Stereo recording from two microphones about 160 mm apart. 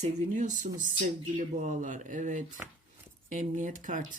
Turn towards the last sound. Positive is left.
turn(degrees=-55)  # may be behind; listen again after turning